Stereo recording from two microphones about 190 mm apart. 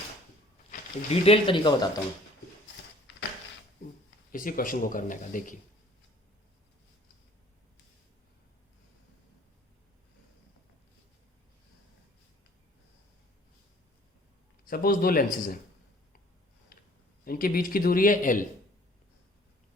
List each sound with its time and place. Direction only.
0.7 s speech: 30° left (ahead or behind)
4.3 s speech: 45° left (ahead or behind)
14.7 s speech: 50° left (ahead or behind)
17.2 s speech: 50° left (ahead or behind)